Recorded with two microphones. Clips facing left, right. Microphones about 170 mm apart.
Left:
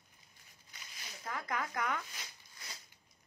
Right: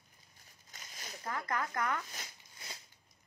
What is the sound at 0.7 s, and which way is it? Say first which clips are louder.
Zipper: right 3 dB; 40° right (ahead or behind).